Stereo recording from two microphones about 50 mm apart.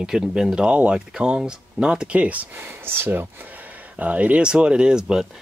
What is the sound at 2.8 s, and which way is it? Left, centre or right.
Speech, right.